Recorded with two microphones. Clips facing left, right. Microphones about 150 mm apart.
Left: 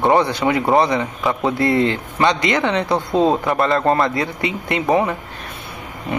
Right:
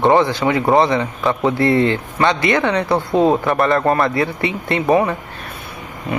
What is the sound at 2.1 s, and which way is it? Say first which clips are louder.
Speech: even; 15° left (ahead or behind).